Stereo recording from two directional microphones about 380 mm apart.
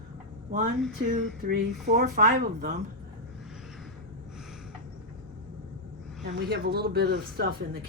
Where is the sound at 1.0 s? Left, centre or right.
Right.